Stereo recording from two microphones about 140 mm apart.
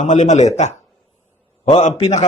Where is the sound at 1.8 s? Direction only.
55° left (ahead or behind).